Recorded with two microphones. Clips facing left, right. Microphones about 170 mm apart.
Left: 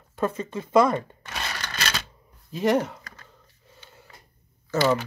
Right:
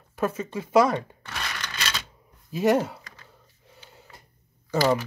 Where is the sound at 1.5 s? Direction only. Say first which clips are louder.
Left 4 dB; 45° left (ahead or behind).